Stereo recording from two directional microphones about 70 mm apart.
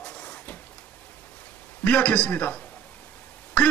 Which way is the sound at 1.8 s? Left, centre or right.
Left.